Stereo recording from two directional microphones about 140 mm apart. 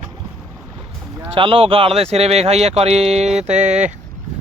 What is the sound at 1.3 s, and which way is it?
Speech, 40° right (ahead or behind).